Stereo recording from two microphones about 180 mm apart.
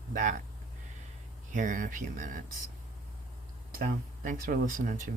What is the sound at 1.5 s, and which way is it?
Speech, 45° right (ahead or behind).